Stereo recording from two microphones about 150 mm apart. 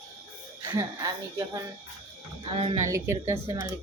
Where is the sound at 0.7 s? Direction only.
25° right (ahead or behind).